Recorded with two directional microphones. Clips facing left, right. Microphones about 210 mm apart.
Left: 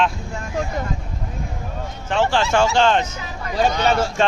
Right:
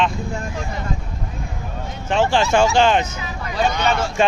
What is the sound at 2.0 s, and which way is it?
Speech, 20° right (ahead or behind).